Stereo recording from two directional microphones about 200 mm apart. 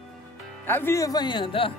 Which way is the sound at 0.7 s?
10° left (ahead or behind).